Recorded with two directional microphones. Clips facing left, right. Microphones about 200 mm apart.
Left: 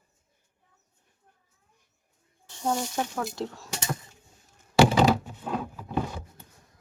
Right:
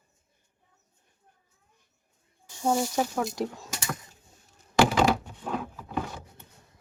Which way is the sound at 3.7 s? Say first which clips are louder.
Left 2 dB; 25° left (ahead or behind).